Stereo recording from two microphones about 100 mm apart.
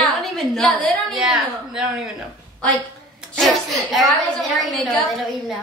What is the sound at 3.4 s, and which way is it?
A woman's voice, centre (ahead or behind).